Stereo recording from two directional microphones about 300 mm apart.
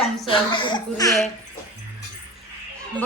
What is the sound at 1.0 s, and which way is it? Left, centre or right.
Speech, centre.